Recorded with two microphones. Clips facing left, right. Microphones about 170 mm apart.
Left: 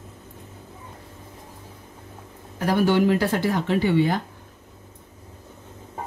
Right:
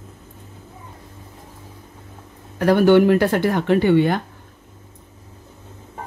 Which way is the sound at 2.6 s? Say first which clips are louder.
Right 6 dB; 60° right (ahead or behind).